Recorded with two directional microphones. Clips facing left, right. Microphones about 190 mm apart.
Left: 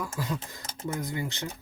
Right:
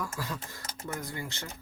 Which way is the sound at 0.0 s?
20° left (ahead or behind).